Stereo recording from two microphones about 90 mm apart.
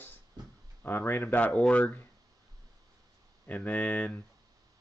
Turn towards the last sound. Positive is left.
turn(degrees=15)  # may be behind; listen again after turning